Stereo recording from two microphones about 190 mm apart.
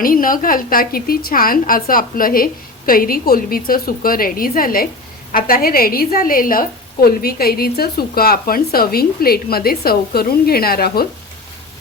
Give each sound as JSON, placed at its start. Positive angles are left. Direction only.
{"t": 0.0, "sound": "a woman's voice", "side_deg": 45}